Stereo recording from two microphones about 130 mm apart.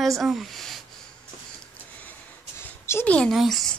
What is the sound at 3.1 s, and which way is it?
Speech, 5° left (ahead or behind).